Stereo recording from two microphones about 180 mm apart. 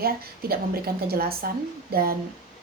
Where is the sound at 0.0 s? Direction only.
55° right (ahead or behind).